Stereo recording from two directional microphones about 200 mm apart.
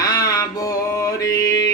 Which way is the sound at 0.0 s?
20° left (ahead or behind).